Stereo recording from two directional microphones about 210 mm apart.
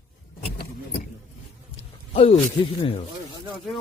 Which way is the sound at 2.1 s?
25° left (ahead or behind).